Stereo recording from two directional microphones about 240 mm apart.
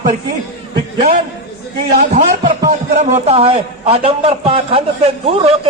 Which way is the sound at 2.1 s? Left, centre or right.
Right.